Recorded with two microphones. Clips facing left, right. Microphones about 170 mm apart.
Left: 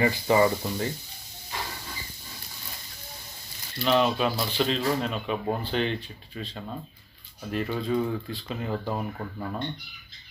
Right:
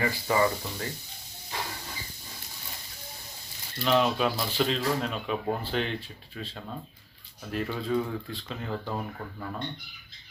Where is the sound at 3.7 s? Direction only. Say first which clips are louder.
Left 1 dB; centre (ahead or behind).